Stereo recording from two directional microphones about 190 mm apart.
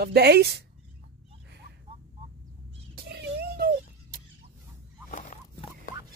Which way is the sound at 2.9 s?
55° right (ahead or behind).